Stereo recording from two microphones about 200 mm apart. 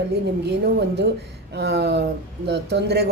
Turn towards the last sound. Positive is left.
turn(degrees=-55)  # may be behind; listen again after turning